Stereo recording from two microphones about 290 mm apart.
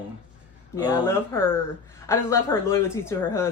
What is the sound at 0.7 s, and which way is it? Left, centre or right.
Speech, centre.